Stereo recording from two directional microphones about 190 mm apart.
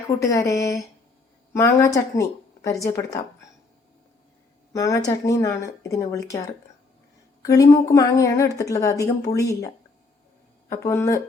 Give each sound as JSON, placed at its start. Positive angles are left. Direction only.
{"t": 0.2, "sound": "a woman's voice", "side_deg": 15}
{"t": 4.7, "sound": "a woman's voice", "side_deg": 15}
{"t": 7.4, "sound": "a woman's voice", "side_deg": 15}
{"t": 10.7, "sound": "a woman's voice", "side_deg": 15}